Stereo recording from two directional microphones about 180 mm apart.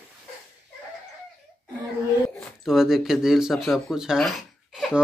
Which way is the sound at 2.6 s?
Centre (ahead or behind).